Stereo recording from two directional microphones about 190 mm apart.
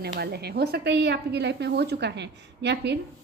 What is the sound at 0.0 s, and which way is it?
A woman's voice, 60° right (ahead or behind).